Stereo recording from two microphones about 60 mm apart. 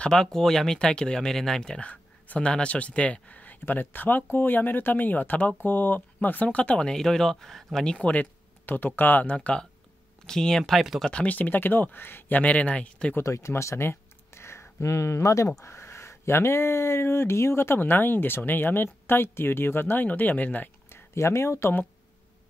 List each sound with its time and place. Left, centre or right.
0.0 s speech: centre
1.8 s speech: left
8.1 s speech: left; by 11.1 s centre
11.1 s speech: left
13.2 s speech: left
20.9 s speech: left